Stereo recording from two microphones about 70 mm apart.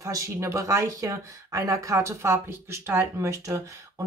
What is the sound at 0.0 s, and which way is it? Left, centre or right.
Speech, right.